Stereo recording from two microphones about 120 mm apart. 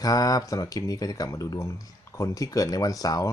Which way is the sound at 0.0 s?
30° left (ahead or behind).